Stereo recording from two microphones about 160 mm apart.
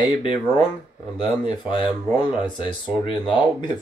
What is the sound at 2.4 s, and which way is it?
Speech, 30° left (ahead or behind).